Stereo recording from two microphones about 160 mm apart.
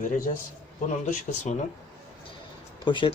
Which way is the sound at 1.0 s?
45° left (ahead or behind).